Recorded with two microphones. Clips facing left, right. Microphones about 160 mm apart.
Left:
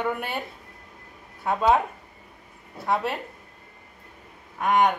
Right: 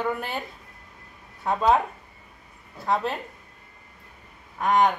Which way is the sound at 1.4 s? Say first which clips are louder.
Even; centre (ahead or behind).